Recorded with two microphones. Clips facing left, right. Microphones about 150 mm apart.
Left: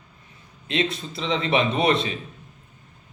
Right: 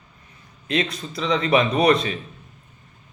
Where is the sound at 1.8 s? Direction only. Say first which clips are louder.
Right 3 dB; 25° left (ahead or behind).